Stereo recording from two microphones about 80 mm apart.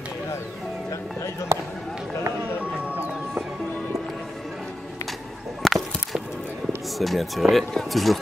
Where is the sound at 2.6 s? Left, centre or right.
Right.